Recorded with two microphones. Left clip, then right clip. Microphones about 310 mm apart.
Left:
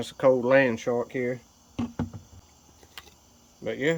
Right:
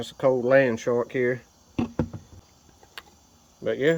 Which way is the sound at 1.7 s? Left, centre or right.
Right.